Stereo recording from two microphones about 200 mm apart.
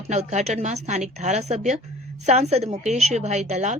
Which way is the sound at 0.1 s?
35° right (ahead or behind).